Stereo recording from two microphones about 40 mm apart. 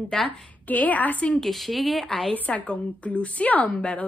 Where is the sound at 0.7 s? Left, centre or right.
Left.